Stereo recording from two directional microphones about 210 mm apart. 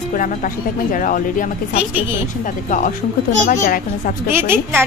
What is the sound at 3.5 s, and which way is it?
Speech, 40° left (ahead or behind).